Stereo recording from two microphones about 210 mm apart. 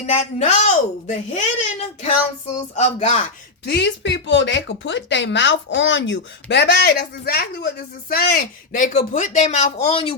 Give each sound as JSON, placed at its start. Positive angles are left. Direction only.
{"t": 0.0, "sound": "a woman's voice", "side_deg": 30}
{"t": 2.5, "sound": "a woman's voice", "side_deg": 30}
{"t": 3.7, "sound": "speech", "side_deg": 55}